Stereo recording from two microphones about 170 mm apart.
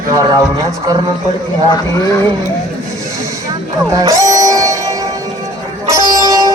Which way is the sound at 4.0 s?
20° right (ahead or behind).